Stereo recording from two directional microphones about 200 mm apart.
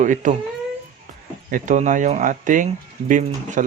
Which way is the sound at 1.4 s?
40° right (ahead or behind).